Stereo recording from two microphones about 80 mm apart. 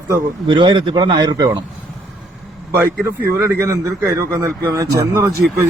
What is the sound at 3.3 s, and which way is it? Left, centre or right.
A man's voice, right.